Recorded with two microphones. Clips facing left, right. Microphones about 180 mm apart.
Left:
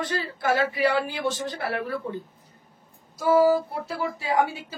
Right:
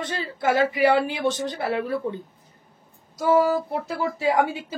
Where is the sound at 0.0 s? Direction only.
25° right (ahead or behind).